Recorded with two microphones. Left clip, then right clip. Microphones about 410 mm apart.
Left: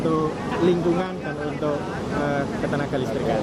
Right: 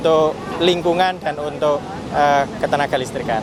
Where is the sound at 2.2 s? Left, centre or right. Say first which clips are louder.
Right 11 dB; right.